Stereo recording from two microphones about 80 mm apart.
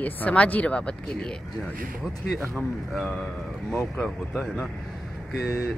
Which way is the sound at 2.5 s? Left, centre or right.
Centre.